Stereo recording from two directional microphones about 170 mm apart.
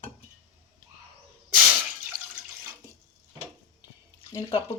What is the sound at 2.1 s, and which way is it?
Water, 20° right (ahead or behind).